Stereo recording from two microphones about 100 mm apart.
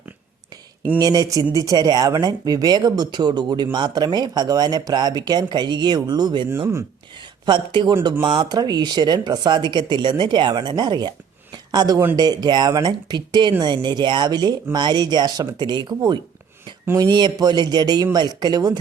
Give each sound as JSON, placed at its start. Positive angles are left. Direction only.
{"t": 0.9, "sound": "speech", "side_deg": -40}
{"t": 11.5, "sound": "a sound", "side_deg": -45}
{"t": 12.1, "sound": "speech", "side_deg": -40}